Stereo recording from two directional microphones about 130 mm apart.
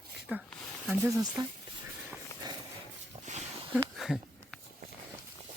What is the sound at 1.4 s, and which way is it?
Speech, 30° right (ahead or behind).